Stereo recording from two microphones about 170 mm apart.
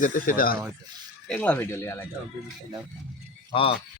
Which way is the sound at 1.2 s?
10° left (ahead or behind).